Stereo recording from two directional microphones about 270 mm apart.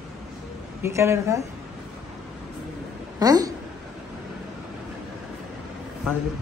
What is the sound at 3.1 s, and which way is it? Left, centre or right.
Speech, centre.